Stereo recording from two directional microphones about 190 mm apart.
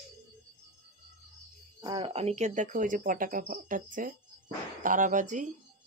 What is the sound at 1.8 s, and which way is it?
Speech, 25° right (ahead or behind).